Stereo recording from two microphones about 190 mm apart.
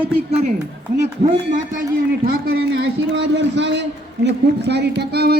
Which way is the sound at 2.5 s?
65° right (ahead or behind).